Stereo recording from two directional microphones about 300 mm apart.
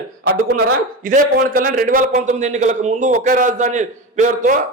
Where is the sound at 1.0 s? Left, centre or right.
Right.